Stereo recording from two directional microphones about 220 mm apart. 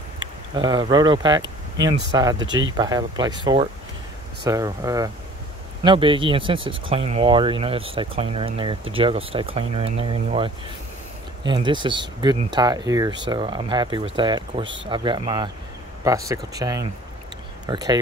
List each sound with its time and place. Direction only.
0.6 s speech: 20° right (ahead or behind)
1.4 s speech: 55° right (ahead or behind)
2.1 s speech: 15° right (ahead or behind)